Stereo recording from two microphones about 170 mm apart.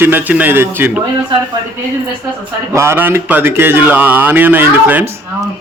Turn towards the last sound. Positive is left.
turn(degrees=-10)  # may be behind; listen again after turning